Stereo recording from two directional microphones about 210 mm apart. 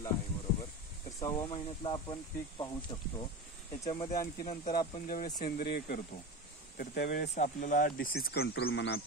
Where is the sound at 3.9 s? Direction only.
20° left (ahead or behind).